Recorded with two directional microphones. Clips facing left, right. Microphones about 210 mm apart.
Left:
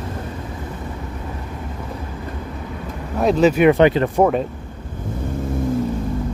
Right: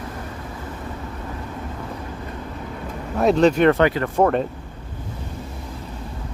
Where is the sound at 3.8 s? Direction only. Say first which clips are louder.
Left 5 dB; 20° left (ahead or behind).